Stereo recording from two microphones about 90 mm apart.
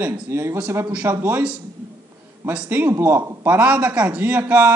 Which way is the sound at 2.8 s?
25° right (ahead or behind).